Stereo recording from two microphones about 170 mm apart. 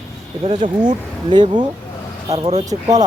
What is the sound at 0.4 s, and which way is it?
Speech, 40° right (ahead or behind).